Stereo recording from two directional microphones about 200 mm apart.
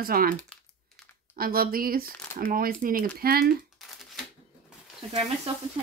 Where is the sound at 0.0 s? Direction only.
45° right (ahead or behind).